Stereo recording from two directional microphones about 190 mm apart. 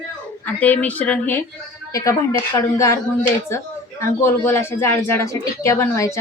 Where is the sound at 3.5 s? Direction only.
15° left (ahead or behind).